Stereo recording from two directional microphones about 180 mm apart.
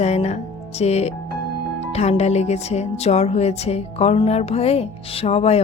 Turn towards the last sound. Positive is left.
turn(degrees=35)  # may be behind; listen again after turning